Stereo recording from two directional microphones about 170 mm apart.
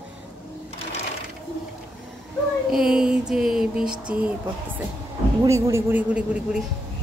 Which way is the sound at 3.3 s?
5° right (ahead or behind).